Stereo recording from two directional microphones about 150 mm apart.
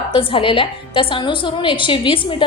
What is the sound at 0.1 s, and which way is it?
A woman's voice, 35° left (ahead or behind).